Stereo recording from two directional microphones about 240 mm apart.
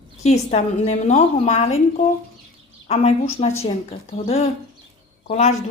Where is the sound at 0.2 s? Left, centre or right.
Left.